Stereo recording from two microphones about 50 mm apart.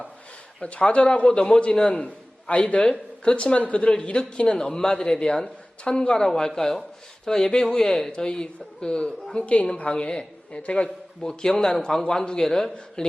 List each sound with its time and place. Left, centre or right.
0.6 s a man's voice: left
2.0 s a man's voice: left
11.2 s a man's voice: centre